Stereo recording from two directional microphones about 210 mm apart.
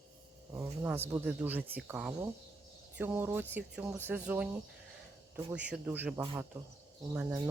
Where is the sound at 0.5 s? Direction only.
10° right (ahead or behind).